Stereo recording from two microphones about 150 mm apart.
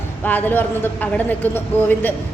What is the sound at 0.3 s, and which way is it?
A woman's voice, 10° left (ahead or behind).